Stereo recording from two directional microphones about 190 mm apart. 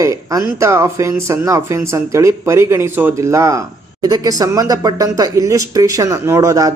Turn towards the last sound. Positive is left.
turn(degrees=-15)  # may be behind; listen again after turning